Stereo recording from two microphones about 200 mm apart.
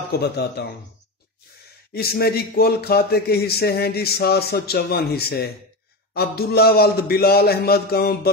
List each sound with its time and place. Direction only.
0.1 s a man's voice: 55° left (ahead or behind)
2.0 s a man's voice: 50° left (ahead or behind)